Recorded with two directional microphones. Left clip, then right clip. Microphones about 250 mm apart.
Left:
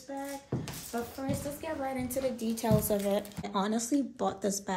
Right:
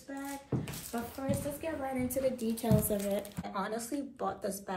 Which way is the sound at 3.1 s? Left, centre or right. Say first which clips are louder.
Left 4 dB; left.